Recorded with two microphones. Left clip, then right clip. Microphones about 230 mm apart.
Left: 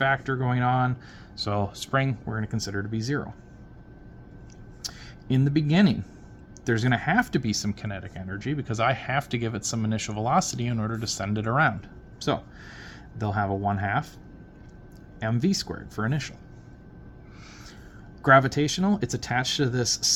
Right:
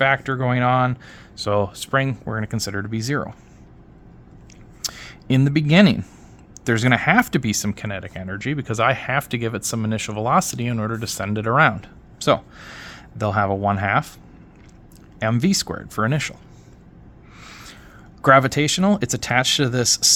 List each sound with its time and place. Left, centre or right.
0.0 s speech: right
2.2 s speech: right
4.8 s speech: right
15.2 s speech: right
17.4 s a sound: right
18.2 s speech: right